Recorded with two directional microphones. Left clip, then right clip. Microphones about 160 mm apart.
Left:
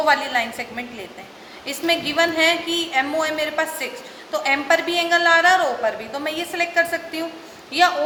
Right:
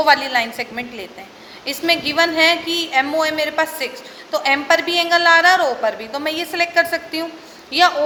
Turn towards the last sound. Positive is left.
turn(degrees=-35)  # may be behind; listen again after turning